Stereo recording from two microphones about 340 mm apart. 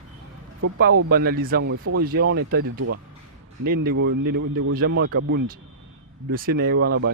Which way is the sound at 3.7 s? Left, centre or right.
Right.